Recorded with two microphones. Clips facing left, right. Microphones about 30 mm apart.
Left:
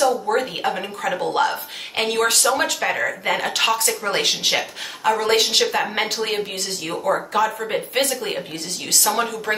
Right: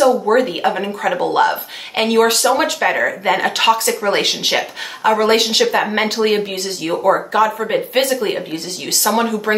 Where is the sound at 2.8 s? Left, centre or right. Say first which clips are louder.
Right 6 dB; right.